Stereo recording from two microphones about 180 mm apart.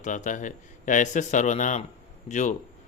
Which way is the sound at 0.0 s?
45° left (ahead or behind).